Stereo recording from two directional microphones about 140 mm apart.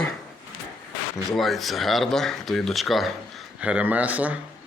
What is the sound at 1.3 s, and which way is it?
Speech, centre (ahead or behind).